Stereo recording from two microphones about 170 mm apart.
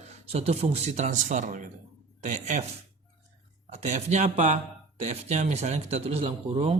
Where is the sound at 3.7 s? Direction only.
40° right (ahead or behind).